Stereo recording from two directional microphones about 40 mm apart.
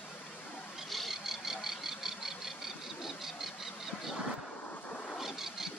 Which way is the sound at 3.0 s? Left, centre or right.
Centre.